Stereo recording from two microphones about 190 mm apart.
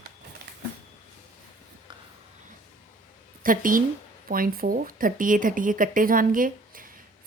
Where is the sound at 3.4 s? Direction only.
45° right (ahead or behind).